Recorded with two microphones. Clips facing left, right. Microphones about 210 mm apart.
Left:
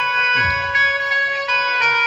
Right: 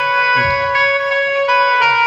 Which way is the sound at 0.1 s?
60° right (ahead or behind).